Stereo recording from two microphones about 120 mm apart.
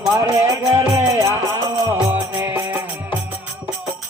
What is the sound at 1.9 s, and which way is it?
Music, 15° right (ahead or behind).